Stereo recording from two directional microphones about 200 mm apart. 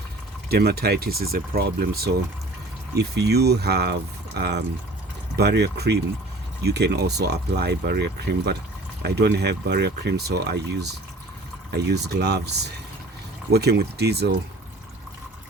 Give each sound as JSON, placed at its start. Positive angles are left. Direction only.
{"t": 0.4, "sound": "speech", "side_deg": -50}
{"t": 3.2, "sound": "speech", "side_deg": -55}
{"t": 11.7, "sound": "speech", "side_deg": -55}